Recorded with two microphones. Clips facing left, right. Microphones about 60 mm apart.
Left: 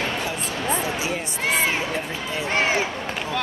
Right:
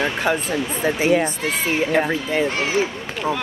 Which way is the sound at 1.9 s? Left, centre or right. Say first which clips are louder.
Right 8 dB; right.